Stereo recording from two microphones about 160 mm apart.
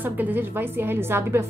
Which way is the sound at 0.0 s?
10° right (ahead or behind).